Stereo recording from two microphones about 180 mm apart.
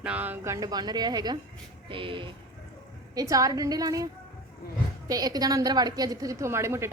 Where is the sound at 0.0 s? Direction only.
10° right (ahead or behind).